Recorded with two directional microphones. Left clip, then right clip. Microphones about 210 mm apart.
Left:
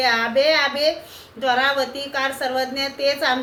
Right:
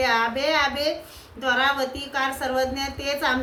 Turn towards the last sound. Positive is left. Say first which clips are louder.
# left 4 dB
turn(degrees=-5)  # may be behind; listen again after turning